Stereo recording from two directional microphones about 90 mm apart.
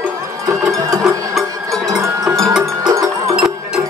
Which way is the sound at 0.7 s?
35° right (ahead or behind).